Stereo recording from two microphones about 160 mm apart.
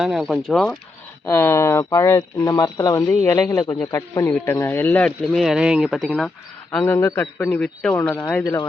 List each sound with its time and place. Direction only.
0.0 s speech: centre (ahead or behind)
1.3 s speech: 15° left (ahead or behind)